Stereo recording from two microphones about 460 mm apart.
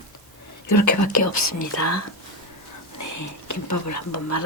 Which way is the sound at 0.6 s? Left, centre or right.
Left.